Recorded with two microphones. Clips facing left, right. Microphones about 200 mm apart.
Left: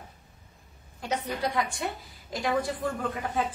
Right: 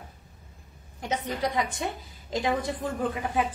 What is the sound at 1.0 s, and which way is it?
A woman's voice, 20° right (ahead or behind).